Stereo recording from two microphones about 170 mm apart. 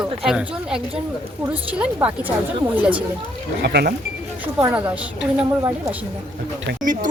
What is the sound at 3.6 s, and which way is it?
Speech, 70° right (ahead or behind).